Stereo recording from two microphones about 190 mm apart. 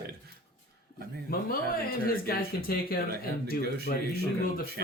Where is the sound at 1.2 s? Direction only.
50° left (ahead or behind).